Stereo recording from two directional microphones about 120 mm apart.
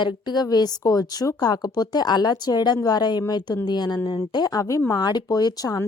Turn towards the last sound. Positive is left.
turn(degrees=30)  # may be behind; listen again after turning